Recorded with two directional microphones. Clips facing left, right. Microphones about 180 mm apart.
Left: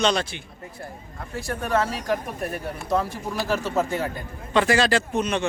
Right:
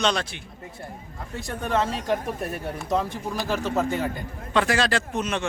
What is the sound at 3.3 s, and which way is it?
Speech, 15° right (ahead or behind).